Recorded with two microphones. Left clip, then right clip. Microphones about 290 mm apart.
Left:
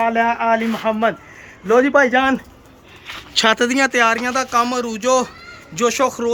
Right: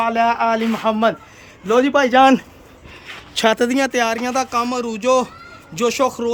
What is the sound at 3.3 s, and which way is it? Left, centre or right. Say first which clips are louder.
Speech: left 1 dB; centre.